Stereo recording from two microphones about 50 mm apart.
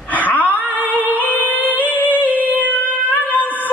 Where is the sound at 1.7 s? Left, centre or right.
Left.